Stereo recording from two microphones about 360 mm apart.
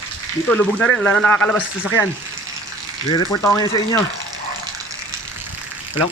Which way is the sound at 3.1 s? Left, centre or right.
Centre.